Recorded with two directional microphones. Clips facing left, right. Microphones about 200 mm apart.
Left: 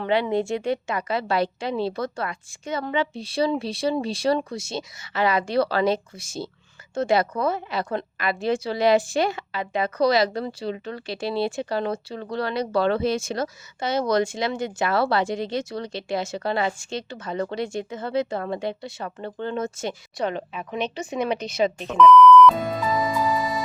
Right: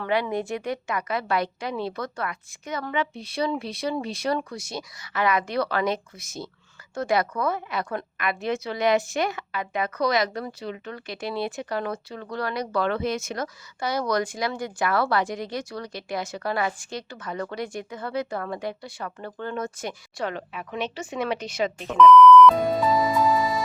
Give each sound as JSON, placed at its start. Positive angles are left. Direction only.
{"t": 0.0, "sound": "a woman's voice", "side_deg": 25}
{"t": 21.8, "sound": "speech", "side_deg": 0}